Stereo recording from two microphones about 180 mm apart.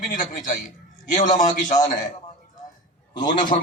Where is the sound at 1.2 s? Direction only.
45° left (ahead or behind).